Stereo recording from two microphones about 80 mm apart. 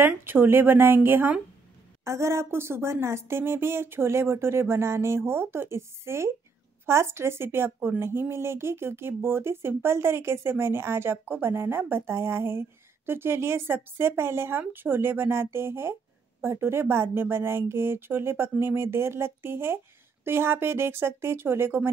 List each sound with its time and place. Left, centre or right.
0.0 s speech: right
2.0 s speech: right